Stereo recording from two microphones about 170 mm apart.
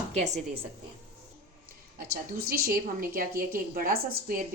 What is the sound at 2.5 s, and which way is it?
A woman's voice, 60° right (ahead or behind).